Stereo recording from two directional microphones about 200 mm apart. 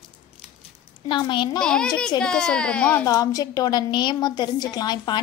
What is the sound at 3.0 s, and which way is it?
A woman's voice, 15° left (ahead or behind).